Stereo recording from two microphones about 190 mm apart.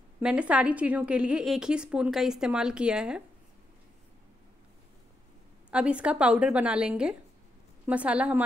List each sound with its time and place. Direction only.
0.2 s a woman's voice: 5° right (ahead or behind)
5.7 s a woman's voice: 5° right (ahead or behind)